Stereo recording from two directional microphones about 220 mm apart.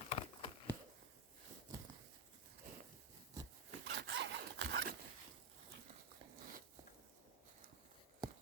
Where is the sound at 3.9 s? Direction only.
50° right (ahead or behind).